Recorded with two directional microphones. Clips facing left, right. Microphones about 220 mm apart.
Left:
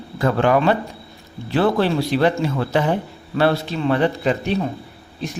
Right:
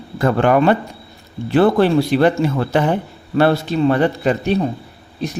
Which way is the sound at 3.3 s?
45° right (ahead or behind).